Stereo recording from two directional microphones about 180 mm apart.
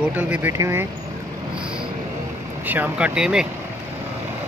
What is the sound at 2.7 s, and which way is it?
Speech, 10° right (ahead or behind).